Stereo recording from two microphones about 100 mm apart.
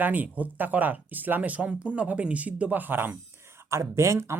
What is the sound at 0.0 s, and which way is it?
Speech, 15° right (ahead or behind).